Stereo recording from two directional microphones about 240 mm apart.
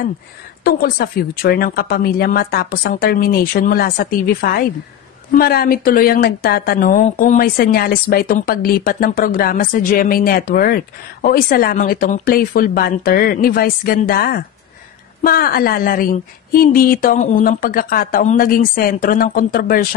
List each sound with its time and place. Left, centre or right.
0.7 s speech: left